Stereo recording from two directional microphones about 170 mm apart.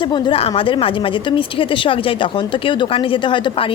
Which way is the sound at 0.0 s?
30° left (ahead or behind).